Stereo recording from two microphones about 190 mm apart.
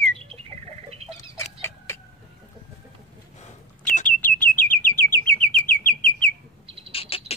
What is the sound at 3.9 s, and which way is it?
Bird, 40° left (ahead or behind).